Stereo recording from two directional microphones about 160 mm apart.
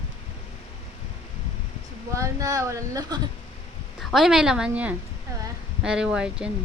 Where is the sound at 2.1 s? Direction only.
20° right (ahead or behind).